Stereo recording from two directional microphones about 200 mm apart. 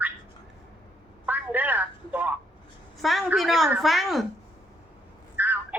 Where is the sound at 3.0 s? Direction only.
Centre (ahead or behind).